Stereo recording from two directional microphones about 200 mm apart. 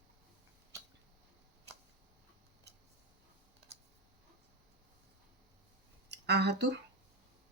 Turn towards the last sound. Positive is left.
turn(degrees=-60)  # may be behind; listen again after turning